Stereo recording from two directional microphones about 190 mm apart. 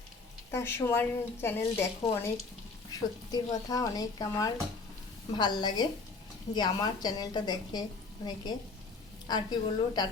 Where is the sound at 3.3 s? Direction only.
20° left (ahead or behind).